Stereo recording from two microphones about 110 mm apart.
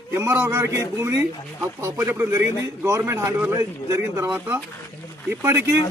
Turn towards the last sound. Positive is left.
turn(degrees=-20)  # may be behind; listen again after turning